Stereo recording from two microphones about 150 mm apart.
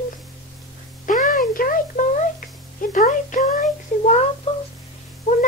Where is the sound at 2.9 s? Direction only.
60° left (ahead or behind).